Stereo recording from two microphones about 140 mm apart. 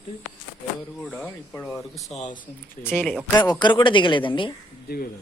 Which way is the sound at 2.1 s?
55° left (ahead or behind).